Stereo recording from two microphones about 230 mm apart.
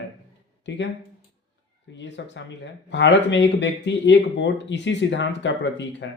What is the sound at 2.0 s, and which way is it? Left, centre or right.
Speech, left.